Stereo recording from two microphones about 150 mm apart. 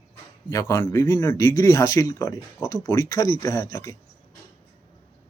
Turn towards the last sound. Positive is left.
turn(degrees=20)  # may be behind; listen again after turning